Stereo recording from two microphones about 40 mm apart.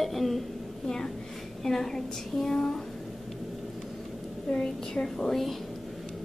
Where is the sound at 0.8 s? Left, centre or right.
Centre.